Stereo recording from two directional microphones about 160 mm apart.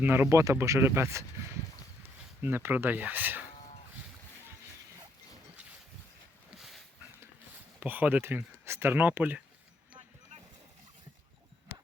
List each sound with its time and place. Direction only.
0.0 s speech: 15° right (ahead or behind)
6.6 s a sound: centre (ahead or behind)
7.8 s speech: 10° right (ahead or behind)